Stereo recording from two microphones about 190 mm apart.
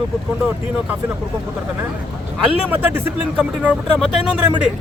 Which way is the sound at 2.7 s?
10° right (ahead or behind).